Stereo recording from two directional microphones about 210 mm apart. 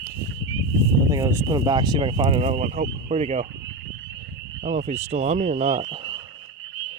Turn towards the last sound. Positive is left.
turn(degrees=-25)  # may be behind; listen again after turning